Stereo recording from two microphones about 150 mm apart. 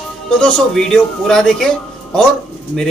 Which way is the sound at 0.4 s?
5° left (ahead or behind).